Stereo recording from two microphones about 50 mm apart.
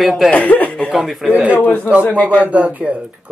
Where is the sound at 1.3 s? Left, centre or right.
Right.